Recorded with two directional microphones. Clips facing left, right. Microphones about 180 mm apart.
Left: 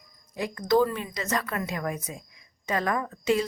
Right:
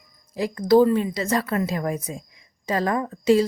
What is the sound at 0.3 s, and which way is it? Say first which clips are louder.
A woman's voice: right 6 dB; 30° right (ahead or behind).